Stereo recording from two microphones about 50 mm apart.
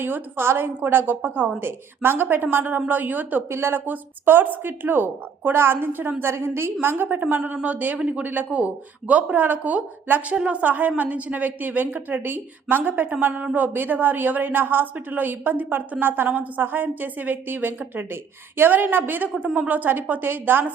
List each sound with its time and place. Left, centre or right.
0.0 s a woman's voice: right
3.5 s a woman's voice: right
6.9 s a woman's voice: right